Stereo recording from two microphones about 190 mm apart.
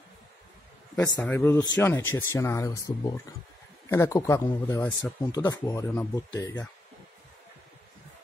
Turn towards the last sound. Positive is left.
turn(degrees=15)  # may be behind; listen again after turning